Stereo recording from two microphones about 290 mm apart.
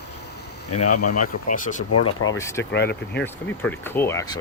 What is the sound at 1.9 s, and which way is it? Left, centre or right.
Speech, left.